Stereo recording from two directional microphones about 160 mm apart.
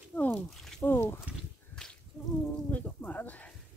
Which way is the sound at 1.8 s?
5° left (ahead or behind).